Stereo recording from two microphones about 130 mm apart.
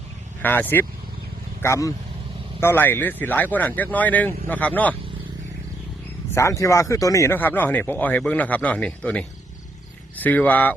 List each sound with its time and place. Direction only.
0.4 s speech: 15° left (ahead or behind)
6.3 s speech: 25° left (ahead or behind)